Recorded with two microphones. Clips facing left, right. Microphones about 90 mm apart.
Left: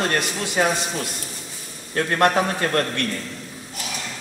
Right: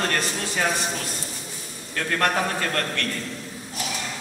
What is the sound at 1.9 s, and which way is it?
A man's voice, 30° left (ahead or behind).